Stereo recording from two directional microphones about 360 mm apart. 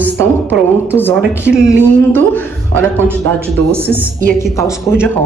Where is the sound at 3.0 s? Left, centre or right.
Centre.